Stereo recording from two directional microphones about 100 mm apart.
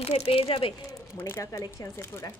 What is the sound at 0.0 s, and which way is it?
Speech, 85° left.